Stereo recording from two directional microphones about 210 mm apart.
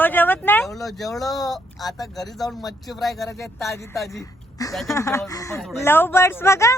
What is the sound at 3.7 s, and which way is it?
Speech, 15° left (ahead or behind).